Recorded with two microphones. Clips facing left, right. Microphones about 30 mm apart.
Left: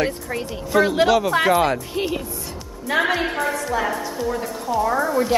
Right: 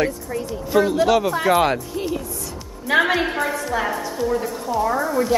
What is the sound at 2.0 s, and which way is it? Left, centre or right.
Speech, left.